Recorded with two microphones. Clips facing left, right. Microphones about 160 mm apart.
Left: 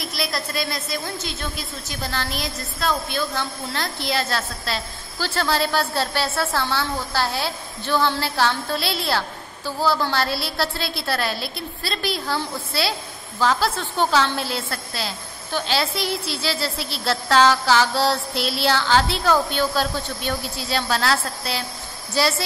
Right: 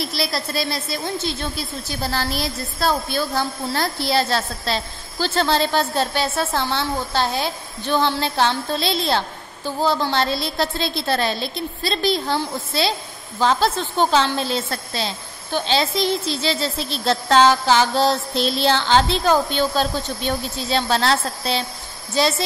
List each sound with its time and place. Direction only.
0.0 s a woman's voice: 30° right (ahead or behind)